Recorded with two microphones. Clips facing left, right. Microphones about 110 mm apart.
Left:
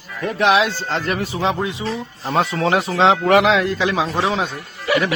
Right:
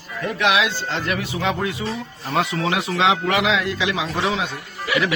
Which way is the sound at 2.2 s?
35° left (ahead or behind).